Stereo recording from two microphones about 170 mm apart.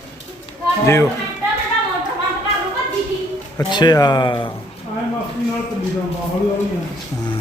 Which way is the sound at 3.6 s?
25° left (ahead or behind).